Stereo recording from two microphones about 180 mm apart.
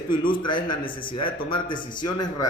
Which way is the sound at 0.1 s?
25° left (ahead or behind).